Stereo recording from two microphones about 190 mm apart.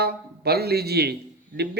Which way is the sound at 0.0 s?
55° right (ahead or behind).